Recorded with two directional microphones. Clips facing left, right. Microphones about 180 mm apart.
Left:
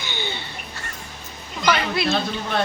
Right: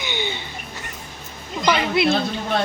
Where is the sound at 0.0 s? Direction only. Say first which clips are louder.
Right 3 dB; 15° right (ahead or behind).